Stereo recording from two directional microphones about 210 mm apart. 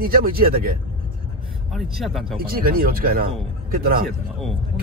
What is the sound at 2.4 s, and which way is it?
A man's voice, 45° right (ahead or behind).